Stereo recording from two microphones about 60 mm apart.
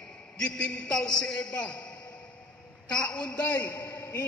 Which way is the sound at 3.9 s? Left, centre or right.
Left.